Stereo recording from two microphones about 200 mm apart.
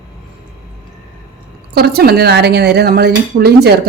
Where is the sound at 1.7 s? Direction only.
50° right (ahead or behind).